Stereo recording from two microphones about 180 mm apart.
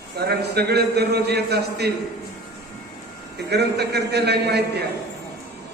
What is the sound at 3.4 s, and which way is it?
A man's voice, 65° right (ahead or behind).